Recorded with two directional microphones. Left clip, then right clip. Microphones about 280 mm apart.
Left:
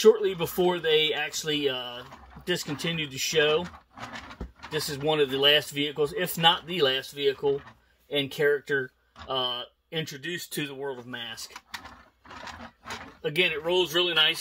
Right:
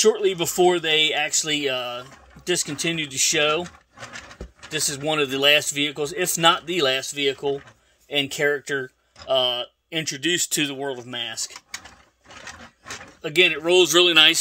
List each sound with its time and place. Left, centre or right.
0.0 s speech: right
4.6 s speech: right
13.2 s speech: right